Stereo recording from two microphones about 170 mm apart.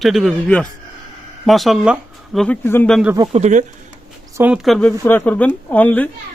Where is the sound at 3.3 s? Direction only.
40° right (ahead or behind).